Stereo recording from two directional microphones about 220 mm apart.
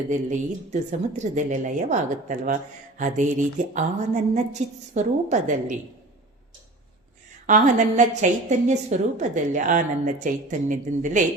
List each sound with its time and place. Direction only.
0.1 s a woman's voice: 35° right (ahead or behind)
7.4 s a woman's voice: 35° right (ahead or behind)